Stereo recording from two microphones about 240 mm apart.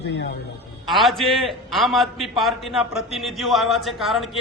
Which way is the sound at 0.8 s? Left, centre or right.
Centre.